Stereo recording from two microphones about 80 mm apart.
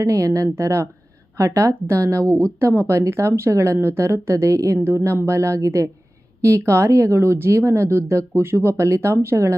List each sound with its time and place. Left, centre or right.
0.0 s speech: right